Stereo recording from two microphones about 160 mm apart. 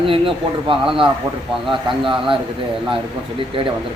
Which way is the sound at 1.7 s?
30° right (ahead or behind).